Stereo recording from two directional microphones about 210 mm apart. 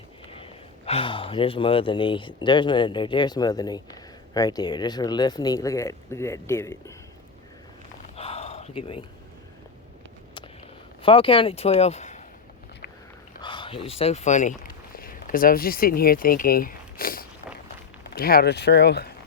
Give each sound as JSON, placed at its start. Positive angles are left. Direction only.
{"t": 0.9, "sound": "speech", "side_deg": 25}
{"t": 8.1, "sound": "gasp", "side_deg": 30}
{"t": 11.0, "sound": "speech", "side_deg": 25}
{"t": 13.4, "sound": "speech", "side_deg": 25}